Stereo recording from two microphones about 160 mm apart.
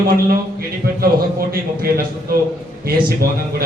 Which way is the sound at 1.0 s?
70° right (ahead or behind).